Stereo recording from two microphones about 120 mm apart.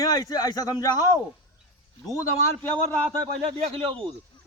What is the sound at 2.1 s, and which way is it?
Speech, 20° left (ahead or behind).